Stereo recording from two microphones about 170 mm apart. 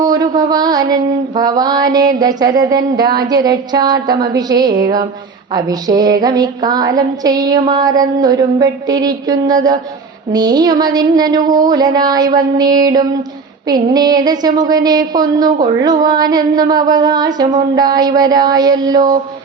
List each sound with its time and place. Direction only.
0.0 s mantra: 25° right (ahead or behind)
1.4 s a woman's voice: 25° right (ahead or behind)